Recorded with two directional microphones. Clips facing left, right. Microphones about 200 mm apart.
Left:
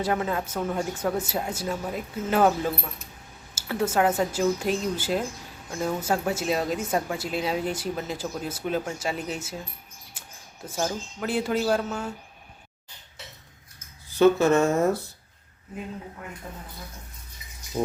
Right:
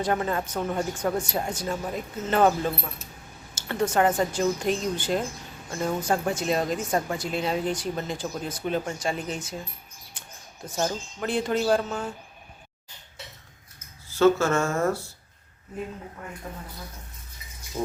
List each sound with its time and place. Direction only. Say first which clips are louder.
0.0 s speech: even; 5° left (ahead or behind)
10.2 s a sound: right 1 dB; 5° left (ahead or behind)
10.7 s speech: right 1 dB; 5° left (ahead or behind)
14.1 s speech: left 2 dB; 15° left (ahead or behind)
17.8 s speech: left 3 dB; 15° left (ahead or behind)